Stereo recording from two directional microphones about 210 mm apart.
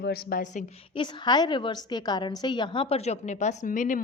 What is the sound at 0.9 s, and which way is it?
A woman's voice, 20° left (ahead or behind).